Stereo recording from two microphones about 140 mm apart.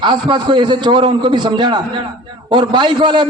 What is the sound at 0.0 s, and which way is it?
A man's voice, 35° right (ahead or behind).